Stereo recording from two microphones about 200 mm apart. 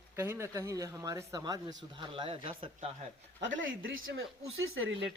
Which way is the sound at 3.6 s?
80° right.